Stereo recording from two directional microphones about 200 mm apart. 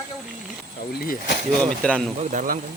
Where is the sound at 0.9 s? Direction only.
50° left (ahead or behind).